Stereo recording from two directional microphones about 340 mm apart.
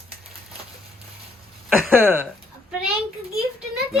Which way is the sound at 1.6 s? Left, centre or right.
Centre.